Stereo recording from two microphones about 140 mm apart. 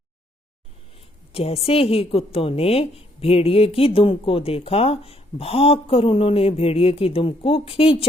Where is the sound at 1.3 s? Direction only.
45° left (ahead or behind).